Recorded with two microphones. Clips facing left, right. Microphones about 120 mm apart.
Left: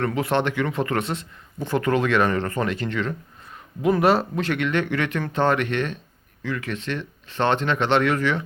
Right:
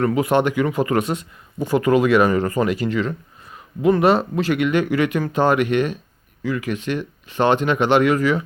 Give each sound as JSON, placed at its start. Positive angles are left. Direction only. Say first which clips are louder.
{"t": 0.0, "sound": "speech", "louder": "right 5 dB", "side_deg": -5}